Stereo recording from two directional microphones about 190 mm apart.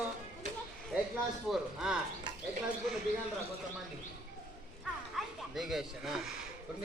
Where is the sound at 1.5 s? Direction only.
5° right (ahead or behind).